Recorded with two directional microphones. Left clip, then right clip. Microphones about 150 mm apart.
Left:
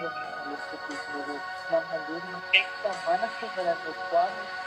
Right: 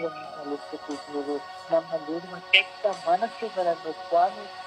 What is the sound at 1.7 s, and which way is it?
A man's voice, 30° right (ahead or behind).